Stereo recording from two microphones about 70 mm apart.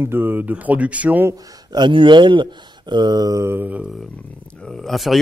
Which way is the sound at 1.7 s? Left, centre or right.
Right.